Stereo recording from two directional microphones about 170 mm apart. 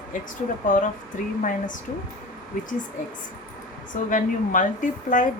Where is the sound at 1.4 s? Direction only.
50° left (ahead or behind).